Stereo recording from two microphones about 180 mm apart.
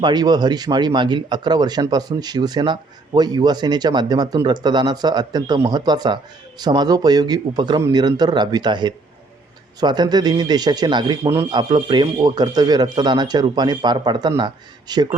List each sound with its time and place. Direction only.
0.0 s a man's voice: 25° right (ahead or behind)